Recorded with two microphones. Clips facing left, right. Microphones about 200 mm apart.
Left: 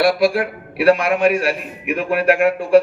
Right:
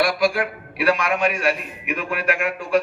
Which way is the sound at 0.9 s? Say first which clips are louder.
Left 6 dB; 30° left (ahead or behind).